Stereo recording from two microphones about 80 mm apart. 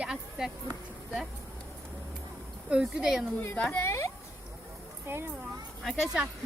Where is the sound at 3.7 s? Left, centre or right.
Left.